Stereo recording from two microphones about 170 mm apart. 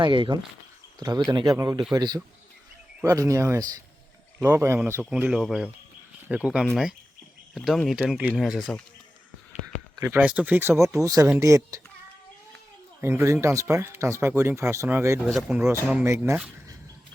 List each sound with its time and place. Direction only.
0.0 s speech: 30° right (ahead or behind); by 8.8 s centre (ahead or behind)
10.0 s speech: 10° right (ahead or behind)
13.0 s speech: 15° right (ahead or behind)
15.3 s speech: 5° right (ahead or behind)